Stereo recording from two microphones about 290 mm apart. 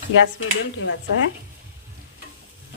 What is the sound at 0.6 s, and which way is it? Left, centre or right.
Speech, left.